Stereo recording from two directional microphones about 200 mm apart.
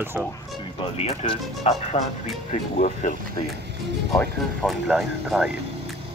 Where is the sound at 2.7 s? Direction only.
40° left (ahead or behind).